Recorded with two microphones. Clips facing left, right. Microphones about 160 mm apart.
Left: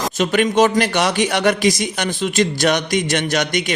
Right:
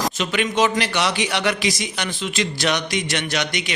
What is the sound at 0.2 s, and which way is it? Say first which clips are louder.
A man's voice: left 7 dB; 45° left (ahead or behind).